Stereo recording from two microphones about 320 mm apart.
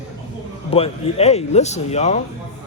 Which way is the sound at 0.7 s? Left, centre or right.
Centre.